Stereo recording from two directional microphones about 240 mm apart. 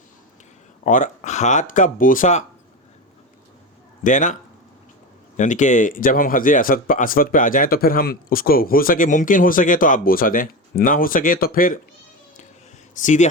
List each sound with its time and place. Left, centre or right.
0.9 s speech: left
4.0 s speech: left
5.4 s speech: left
13.0 s speech: left